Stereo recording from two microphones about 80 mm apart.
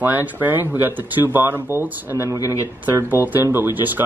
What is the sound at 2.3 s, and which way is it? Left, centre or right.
Speech, left.